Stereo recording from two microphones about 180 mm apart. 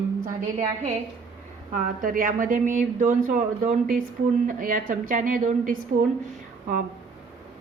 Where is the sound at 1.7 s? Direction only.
50° right (ahead or behind).